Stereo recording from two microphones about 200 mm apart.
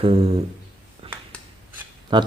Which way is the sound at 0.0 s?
30° right (ahead or behind).